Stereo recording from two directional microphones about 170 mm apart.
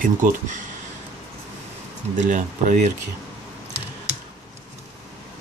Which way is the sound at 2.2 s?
50° right (ahead or behind).